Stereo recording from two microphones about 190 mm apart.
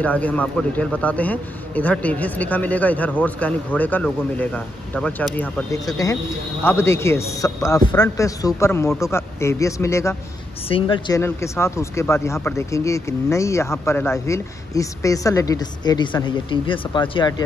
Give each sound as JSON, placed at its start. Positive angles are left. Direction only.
{"t": 0.0, "sound": "speech", "side_deg": 5}
{"t": 10.7, "sound": "a woman's voice", "side_deg": 25}
{"t": 11.1, "sound": "speech", "side_deg": 15}